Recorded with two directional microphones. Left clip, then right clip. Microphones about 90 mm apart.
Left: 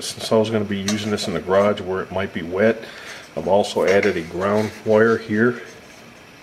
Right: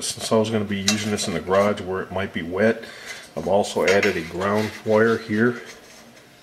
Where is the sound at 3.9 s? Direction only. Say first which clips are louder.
Left 2 dB; 20° left (ahead or behind).